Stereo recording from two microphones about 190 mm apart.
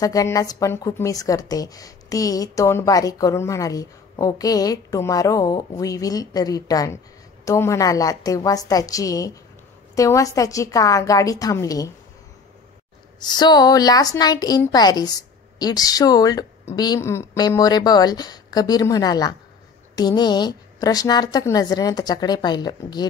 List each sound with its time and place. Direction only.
0.0 s a woman's voice: 20° left (ahead or behind)
13.2 s a woman's voice: 20° left (ahead or behind)